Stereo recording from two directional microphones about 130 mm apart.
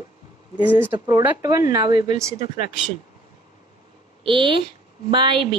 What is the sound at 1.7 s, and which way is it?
Speech, 35° right (ahead or behind).